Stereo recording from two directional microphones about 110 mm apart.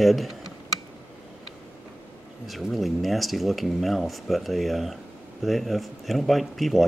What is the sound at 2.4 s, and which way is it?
Speech, centre (ahead or behind).